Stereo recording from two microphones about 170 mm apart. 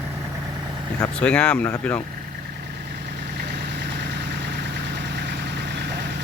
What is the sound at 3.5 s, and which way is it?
Vehicle, 80° right.